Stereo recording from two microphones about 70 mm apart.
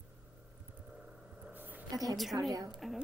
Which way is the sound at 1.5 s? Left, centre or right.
Right.